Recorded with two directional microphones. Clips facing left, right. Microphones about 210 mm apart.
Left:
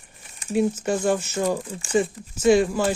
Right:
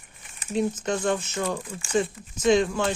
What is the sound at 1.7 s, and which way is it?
Speech, 35° left (ahead or behind).